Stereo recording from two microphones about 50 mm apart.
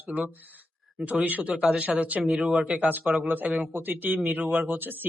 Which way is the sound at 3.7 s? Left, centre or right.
Right.